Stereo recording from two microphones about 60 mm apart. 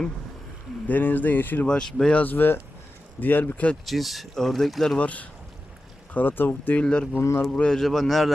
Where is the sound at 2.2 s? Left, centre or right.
Left.